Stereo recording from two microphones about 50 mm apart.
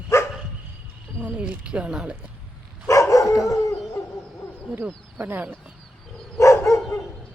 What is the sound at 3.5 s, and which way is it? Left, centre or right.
Howl, left.